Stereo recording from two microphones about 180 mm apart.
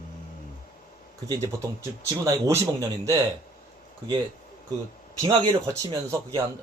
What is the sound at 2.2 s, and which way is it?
Speech, 15° right (ahead or behind).